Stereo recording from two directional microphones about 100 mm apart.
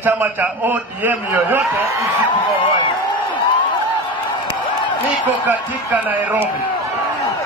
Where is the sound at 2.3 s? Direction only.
55° left (ahead or behind).